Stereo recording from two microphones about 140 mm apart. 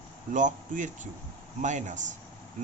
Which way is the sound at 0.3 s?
65° right (ahead or behind).